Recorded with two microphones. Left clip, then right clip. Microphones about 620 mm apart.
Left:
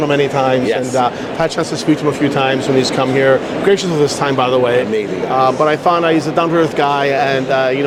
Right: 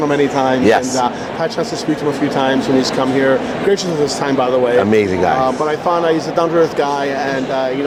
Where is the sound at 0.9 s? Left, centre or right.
Left.